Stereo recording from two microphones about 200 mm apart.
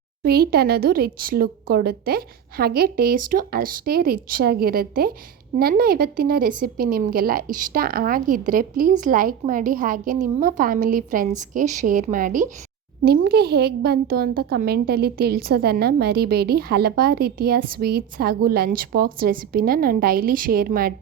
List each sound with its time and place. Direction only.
0.2 s a woman's voice: 50° right (ahead or behind)
13.1 s a woman's voice: 50° right (ahead or behind)